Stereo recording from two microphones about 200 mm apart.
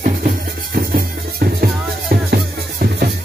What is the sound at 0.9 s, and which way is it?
Music, 50° right (ahead or behind).